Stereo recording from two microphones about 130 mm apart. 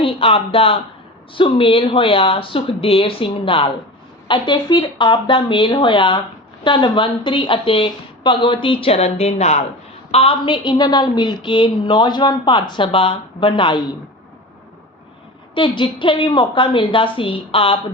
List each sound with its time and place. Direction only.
0.0 s a woman's voice: 45° left (ahead or behind)
10.1 s a woman's voice: 45° left (ahead or behind)
15.5 s a woman's voice: 40° left (ahead or behind)